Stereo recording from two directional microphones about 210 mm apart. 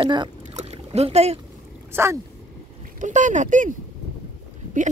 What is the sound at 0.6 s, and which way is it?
Boat, 30° right (ahead or behind).